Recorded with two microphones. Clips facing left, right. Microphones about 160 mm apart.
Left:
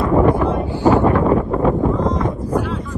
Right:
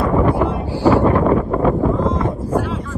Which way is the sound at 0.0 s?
10° right (ahead or behind).